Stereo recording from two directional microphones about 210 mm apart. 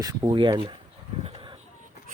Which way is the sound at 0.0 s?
15° right (ahead or behind).